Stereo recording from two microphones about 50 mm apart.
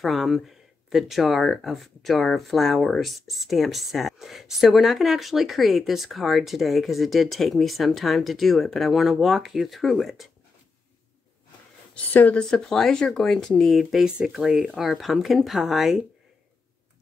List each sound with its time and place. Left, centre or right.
0.0 s speech: centre
12.1 s speech: left
12.4 s speech: centre
14.2 s speech: centre
14.8 s speech: centre